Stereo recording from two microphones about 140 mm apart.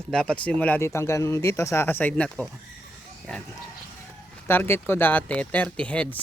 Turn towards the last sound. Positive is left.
turn(degrees=10)  # may be behind; listen again after turning